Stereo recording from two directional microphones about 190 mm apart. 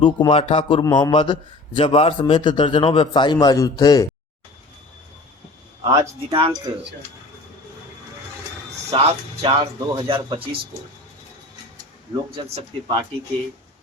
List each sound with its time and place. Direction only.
0.0 s a man's voice: 25° left (ahead or behind)
5.8 s speech: 15° right (ahead or behind)
6.3 s speech: 25° right (ahead or behind)
8.9 s speech: 30° right (ahead or behind)
12.5 s speech: 25° right (ahead or behind)